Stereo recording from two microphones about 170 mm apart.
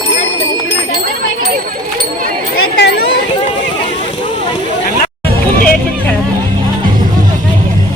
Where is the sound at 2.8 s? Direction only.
75° left (ahead or behind).